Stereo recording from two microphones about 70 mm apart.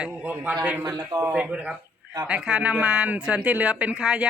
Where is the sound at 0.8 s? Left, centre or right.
Right.